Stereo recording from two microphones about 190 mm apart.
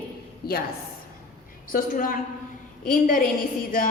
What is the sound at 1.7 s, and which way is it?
A woman's voice, 45° left (ahead or behind).